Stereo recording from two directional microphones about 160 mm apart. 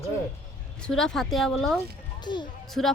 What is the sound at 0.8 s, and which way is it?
Speech, 5° left (ahead or behind).